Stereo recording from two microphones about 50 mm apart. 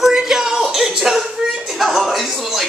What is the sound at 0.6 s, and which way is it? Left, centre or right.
Speech, centre.